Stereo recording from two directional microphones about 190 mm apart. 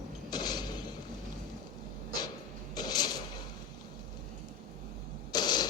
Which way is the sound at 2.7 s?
20° left (ahead or behind).